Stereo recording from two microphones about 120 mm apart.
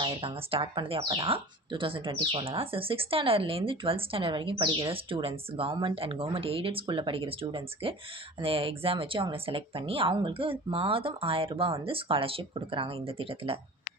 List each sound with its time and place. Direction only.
0.0 s speech: 50° right (ahead or behind)